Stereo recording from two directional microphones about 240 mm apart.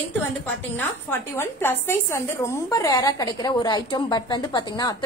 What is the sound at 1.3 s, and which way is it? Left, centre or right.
A woman's voice, centre.